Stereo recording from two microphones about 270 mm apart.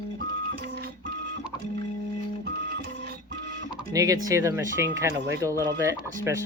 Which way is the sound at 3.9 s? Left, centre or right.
Centre.